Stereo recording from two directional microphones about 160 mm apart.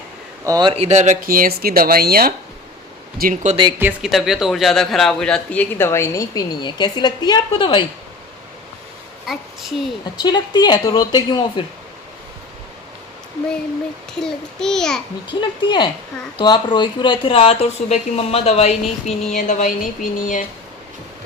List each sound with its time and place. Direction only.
0.4 s speech: 25° right (ahead or behind)
0.8 s speech: 45° right (ahead or behind); by 2.3 s 70° right (ahead or behind)
3.2 s speech: 60° right (ahead or behind)
3.5 s speech: 30° right (ahead or behind)
3.8 s speech: 10° right (ahead or behind); by 7.9 s 30° left (ahead or behind)
9.2 s speech: centre (ahead or behind)
10.2 s a woman's voice: 25° left (ahead or behind)
14.2 s a child's voice: 5° left (ahead or behind)
15.3 s a woman's voice: 30° left (ahead or behind); by 20.4 s 55° left (ahead or behind)